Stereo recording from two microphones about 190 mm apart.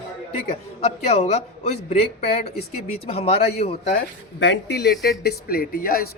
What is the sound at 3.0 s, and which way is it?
Speech, 30° left (ahead or behind).